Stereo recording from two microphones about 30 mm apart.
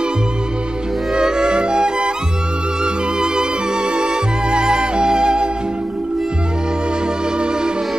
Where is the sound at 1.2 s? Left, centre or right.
Right.